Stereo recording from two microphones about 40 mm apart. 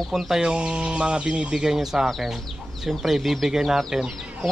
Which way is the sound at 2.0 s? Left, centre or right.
Centre.